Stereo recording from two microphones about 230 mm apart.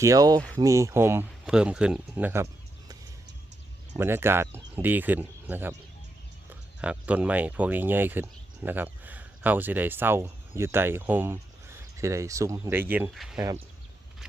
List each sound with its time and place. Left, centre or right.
0.0 s speech: centre
3.9 s speech: centre